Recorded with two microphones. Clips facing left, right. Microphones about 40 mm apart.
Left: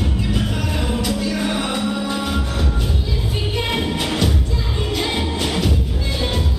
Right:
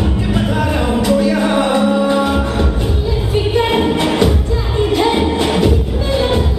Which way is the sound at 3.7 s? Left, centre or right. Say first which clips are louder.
Right 7 dB; centre.